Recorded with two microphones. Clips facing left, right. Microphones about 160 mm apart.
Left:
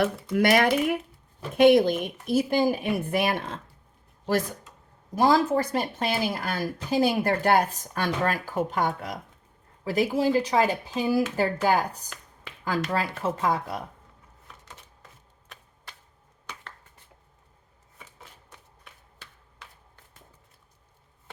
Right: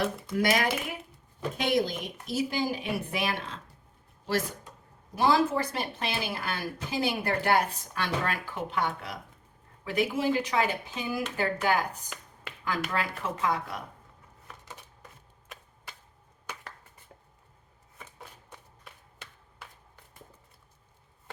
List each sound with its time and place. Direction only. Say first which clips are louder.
0.0 s speech: left 5 dB; 60° left (ahead or behind)
5.1 s speech: left 3 dB; 40° left (ahead or behind)
12.0 s a sound: right 1 dB; centre (ahead or behind)
12.9 s speech: left 4 dB; 35° left (ahead or behind)
17.9 s shuffling cards: right 2 dB; centre (ahead or behind)